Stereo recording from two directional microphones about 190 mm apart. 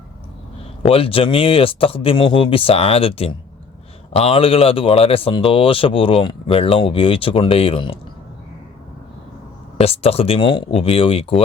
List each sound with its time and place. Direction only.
0.8 s speech: 30° left (ahead or behind)
9.7 s speech: 30° left (ahead or behind)